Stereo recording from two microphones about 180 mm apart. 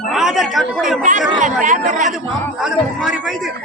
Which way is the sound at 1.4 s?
45° right (ahead or behind).